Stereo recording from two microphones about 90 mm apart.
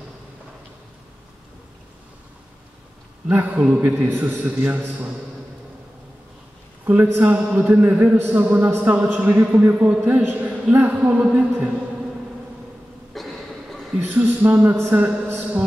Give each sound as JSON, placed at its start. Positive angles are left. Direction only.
{"t": 3.3, "sound": "a man's voice", "side_deg": -15}
{"t": 6.9, "sound": "a man's voice", "side_deg": -20}
{"t": 13.1, "sound": "a sound", "side_deg": 0}
{"t": 13.9, "sound": "a man's voice", "side_deg": -20}